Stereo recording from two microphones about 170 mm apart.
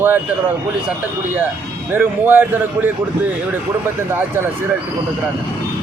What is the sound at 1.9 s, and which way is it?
Speech, 10° right (ahead or behind).